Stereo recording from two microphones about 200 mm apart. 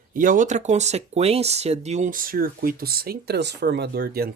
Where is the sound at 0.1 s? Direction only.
40° right (ahead or behind).